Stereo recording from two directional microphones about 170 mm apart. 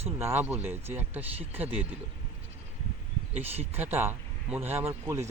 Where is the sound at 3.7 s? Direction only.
10° right (ahead or behind).